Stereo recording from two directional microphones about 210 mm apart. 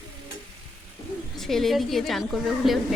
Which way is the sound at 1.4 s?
Centre (ahead or behind).